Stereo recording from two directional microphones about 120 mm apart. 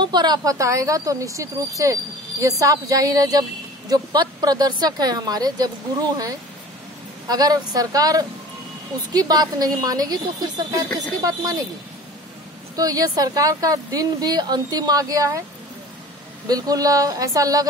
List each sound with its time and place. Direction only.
0.0 s a woman's voice: 35° right (ahead or behind)
12.7 s speech: 30° right (ahead or behind)
16.4 s speech: 30° right (ahead or behind)